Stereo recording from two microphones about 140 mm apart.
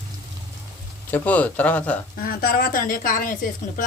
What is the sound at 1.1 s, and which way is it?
Speech, 10° left (ahead or behind).